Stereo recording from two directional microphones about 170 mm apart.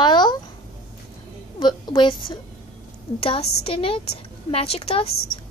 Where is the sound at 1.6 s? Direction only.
25° left (ahead or behind).